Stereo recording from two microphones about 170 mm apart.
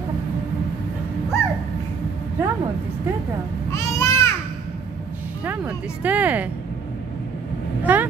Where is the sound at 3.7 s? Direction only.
15° left (ahead or behind).